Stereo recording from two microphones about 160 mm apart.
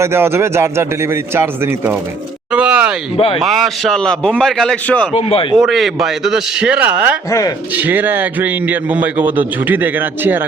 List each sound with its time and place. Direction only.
0.0 s a man's voice: 15° right (ahead or behind)
2.5 s a sound: 5° right (ahead or behind)
3.4 s a man's voice: centre (ahead or behind)
5.1 s speech: 35° left (ahead or behind)
5.5 s a man's voice: centre (ahead or behind)
7.3 s speech: 20° left (ahead or behind)
7.7 s a man's voice: 10° right (ahead or behind)